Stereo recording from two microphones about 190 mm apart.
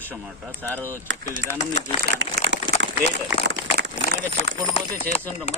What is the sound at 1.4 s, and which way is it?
Speech, 75° right (ahead or behind).